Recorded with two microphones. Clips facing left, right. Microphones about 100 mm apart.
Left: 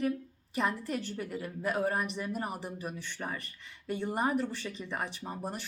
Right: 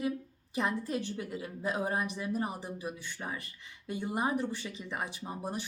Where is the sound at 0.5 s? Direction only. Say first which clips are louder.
Even; 20° right (ahead or behind).